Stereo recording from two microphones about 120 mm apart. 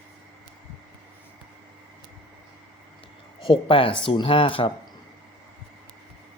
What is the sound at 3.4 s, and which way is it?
A man's voice, 45° left (ahead or behind).